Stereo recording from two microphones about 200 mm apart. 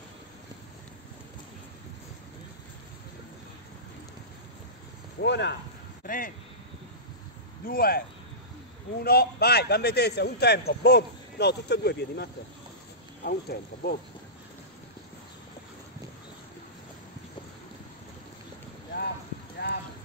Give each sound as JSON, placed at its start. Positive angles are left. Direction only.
{"t": 5.2, "sound": "a man's voice", "side_deg": 60}
{"t": 6.0, "sound": "speech", "side_deg": 45}
{"t": 7.6, "sound": "speech", "side_deg": 50}
{"t": 9.0, "sound": "a man's voice", "side_deg": 50}
{"t": 19.6, "sound": "clip-clop", "side_deg": 55}